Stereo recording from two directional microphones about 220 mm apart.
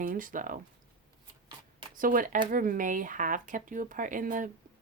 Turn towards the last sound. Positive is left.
turn(degrees=-40)  # may be behind; listen again after turning